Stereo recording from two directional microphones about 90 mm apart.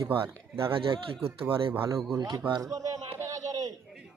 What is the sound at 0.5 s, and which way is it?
Speech, 75° right (ahead or behind).